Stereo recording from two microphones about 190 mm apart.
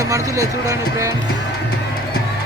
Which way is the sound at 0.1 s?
15° right (ahead or behind).